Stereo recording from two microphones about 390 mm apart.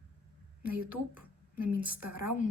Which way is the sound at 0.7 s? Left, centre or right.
Right.